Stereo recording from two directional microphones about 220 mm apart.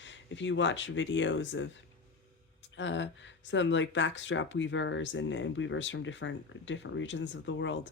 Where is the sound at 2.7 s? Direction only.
55° left (ahead or behind).